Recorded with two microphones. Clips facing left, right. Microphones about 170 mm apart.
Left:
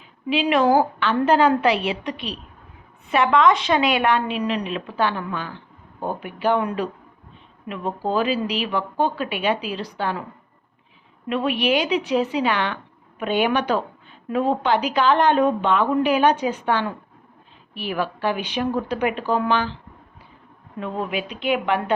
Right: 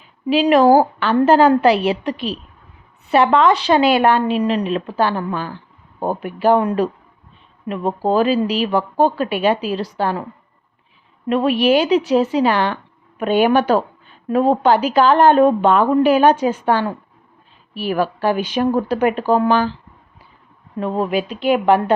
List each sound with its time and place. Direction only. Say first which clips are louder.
0.3 s speech: right 6 dB; 40° right (ahead or behind)
11.3 s speech: right 6 dB; 40° right (ahead or behind)
20.7 s speech: right 7 dB; 40° right (ahead or behind)